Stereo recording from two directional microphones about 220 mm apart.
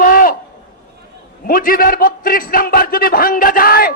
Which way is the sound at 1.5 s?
40° left (ahead or behind).